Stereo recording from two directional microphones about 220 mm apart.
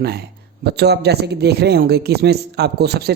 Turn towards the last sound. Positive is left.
turn(degrees=-45)  # may be behind; listen again after turning